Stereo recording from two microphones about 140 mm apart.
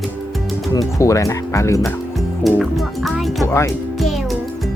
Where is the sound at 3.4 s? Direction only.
20° left (ahead or behind).